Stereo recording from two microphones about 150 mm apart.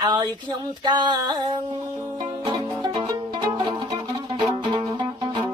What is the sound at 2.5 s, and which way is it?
Music, 35° right (ahead or behind).